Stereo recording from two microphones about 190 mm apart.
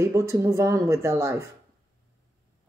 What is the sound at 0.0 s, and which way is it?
Speech, 15° right (ahead or behind).